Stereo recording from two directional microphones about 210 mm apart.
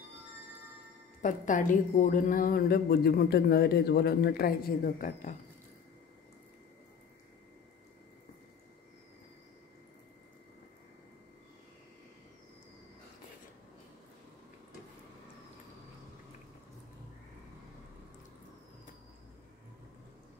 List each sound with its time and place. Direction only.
1.2 s a woman's voice: 35° left (ahead or behind)